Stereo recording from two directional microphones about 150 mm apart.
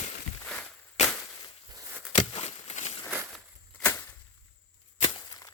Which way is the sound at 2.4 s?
45° left (ahead or behind).